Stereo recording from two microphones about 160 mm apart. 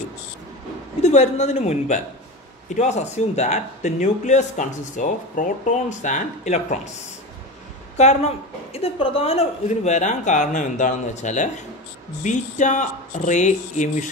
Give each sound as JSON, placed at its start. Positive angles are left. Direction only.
{"t": 1.0, "sound": "speech", "side_deg": 45}
{"t": 8.0, "sound": "speech", "side_deg": 45}